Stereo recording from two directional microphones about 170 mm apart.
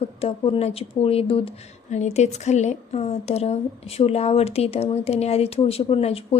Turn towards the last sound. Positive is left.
turn(degrees=35)  # may be behind; listen again after turning